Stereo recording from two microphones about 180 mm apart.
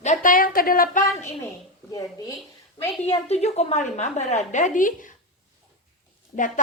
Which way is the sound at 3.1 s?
35° left (ahead or behind).